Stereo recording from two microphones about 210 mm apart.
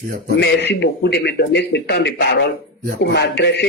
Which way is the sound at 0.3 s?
55° left (ahead or behind).